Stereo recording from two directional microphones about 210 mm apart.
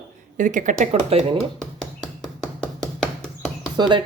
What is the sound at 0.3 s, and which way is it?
Speech, 40° right (ahead or behind).